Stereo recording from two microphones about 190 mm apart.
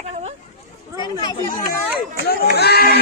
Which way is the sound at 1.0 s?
20° left (ahead or behind).